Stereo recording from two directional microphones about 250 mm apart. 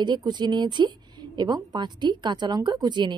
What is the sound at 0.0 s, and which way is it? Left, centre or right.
A woman's voice, centre.